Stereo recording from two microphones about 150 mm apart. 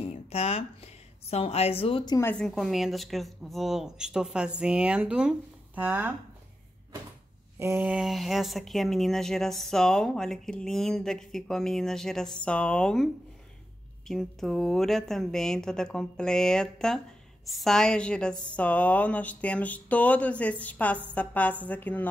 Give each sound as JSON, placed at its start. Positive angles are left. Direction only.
{"t": 0.0, "sound": "a sound", "side_deg": 45}
{"t": 1.2, "sound": "a woman's voice", "side_deg": 45}
{"t": 2.3, "sound": "speech", "side_deg": 0}
{"t": 7.5, "sound": "speech", "side_deg": -15}
{"t": 7.9, "sound": "speech", "side_deg": 0}